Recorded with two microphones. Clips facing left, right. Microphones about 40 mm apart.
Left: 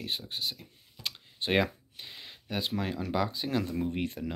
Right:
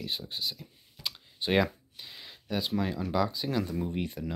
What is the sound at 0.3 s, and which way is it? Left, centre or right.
Speech, centre.